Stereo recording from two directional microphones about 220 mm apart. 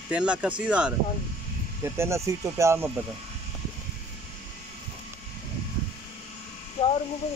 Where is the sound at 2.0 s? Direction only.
10° right (ahead or behind).